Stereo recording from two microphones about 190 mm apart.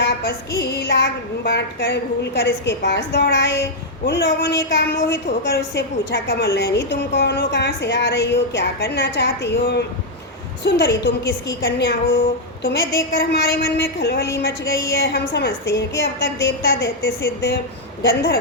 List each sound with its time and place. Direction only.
0.0 s female singing: 55° left (ahead or behind)
0.6 s a woman's voice: 60° left (ahead or behind)